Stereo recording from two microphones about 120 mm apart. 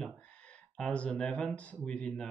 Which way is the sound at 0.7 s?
10° left (ahead or behind).